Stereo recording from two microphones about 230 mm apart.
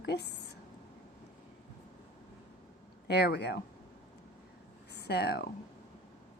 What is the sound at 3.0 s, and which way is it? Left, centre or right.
Speech, left.